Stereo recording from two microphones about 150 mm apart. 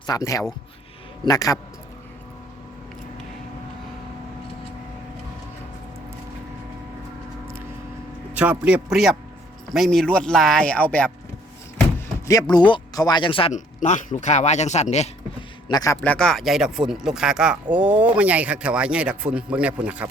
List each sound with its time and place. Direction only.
0.0 s speech: 25° left (ahead or behind)
8.3 s speech: 10° right (ahead or behind); by 11.1 s 10° left (ahead or behind)
11.9 s speech: 20° left (ahead or behind)
13.5 s speech: 55° left (ahead or behind)
15.7 s speech: 25° left (ahead or behind)
16.0 s speech: 5° left (ahead or behind)